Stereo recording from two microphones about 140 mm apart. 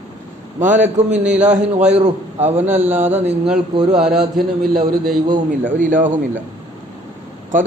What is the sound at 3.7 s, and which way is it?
Speech, 30° right (ahead or behind).